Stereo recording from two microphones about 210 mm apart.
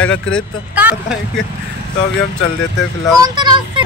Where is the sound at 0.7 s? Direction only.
5° right (ahead or behind).